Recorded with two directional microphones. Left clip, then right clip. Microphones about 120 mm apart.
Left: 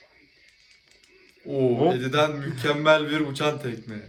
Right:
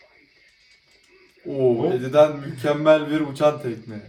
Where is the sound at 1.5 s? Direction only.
45° right (ahead or behind).